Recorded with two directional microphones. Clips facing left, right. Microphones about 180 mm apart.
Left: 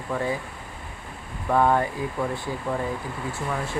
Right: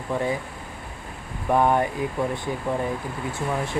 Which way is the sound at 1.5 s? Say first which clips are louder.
Right 1 dB; 15° right (ahead or behind).